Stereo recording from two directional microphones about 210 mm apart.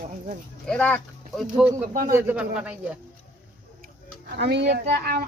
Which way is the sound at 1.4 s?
5° right (ahead or behind).